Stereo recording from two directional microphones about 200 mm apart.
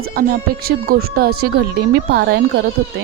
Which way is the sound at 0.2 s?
45° right (ahead or behind).